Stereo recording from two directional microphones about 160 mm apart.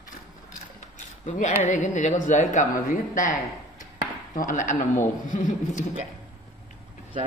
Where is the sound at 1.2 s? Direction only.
45° left (ahead or behind).